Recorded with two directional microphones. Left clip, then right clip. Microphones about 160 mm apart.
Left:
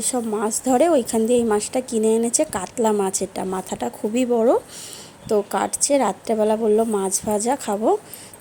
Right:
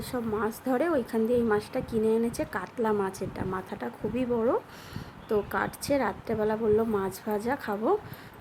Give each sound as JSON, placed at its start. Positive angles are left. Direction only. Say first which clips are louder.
{"t": 0.0, "sound": "a woman's voice", "louder": "left 7 dB", "side_deg": 35}